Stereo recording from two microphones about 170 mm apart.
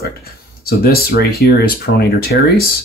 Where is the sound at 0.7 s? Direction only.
65° left (ahead or behind).